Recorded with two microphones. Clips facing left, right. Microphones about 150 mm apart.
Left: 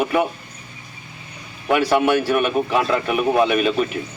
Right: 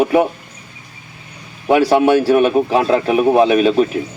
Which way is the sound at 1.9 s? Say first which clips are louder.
Right 5 dB; 35° right (ahead or behind).